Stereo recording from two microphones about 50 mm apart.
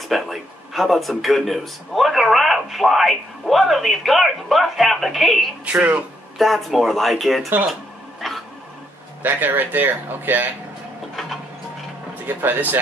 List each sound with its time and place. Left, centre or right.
0.1 s a man's voice: centre
5.8 s speech: right
6.3 s a man's voice: centre
8.2 s dog: centre
9.2 s speech: right
12.3 s speech: right